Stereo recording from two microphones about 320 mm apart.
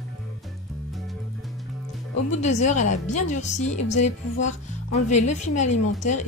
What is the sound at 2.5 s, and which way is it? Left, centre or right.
A woman's voice, left.